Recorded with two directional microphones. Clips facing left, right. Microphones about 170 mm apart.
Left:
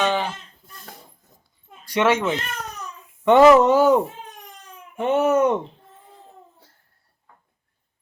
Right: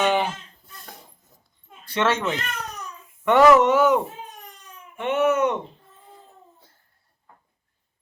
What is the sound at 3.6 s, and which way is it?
Speech, 35° left (ahead or behind).